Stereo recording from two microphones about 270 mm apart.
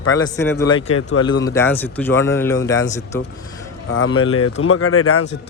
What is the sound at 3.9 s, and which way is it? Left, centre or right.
Speech, left.